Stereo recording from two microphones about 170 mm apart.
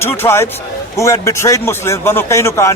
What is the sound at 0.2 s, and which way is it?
A man's voice, 15° left (ahead or behind).